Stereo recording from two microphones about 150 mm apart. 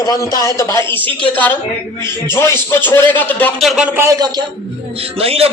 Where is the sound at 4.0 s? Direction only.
25° right (ahead or behind).